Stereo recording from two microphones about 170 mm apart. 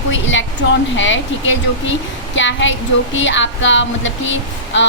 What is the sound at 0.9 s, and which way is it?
A woman's voice, 90° left.